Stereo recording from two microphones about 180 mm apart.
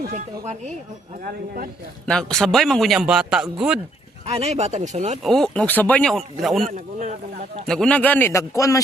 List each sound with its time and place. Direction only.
0.1 s speech: 40° right (ahead or behind)
1.2 s speech: 55° right (ahead or behind)
2.0 s a man's voice: 5° left (ahead or behind)
4.3 s speech: 35° right (ahead or behind)
5.2 s a man's voice: 5° left (ahead or behind)
6.7 s speech: 40° right (ahead or behind)
7.7 s a man's voice: 5° left (ahead or behind)